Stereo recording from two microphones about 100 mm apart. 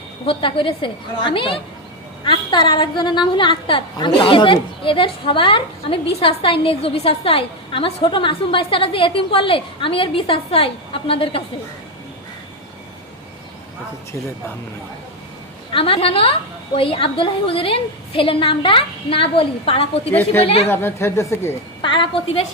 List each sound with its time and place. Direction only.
0.3 s a woman's voice: 60° left (ahead or behind)
15.7 s a woman's voice: 65° left (ahead or behind)
20.1 s speech: 20° left (ahead or behind)
20.4 s a woman's voice: 75° left (ahead or behind)
20.7 s speech: 25° left (ahead or behind)
21.8 s a woman's voice: 55° left (ahead or behind); by 22.4 s 70° left (ahead or behind)